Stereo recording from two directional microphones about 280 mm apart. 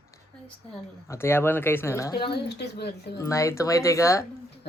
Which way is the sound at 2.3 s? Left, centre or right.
Left.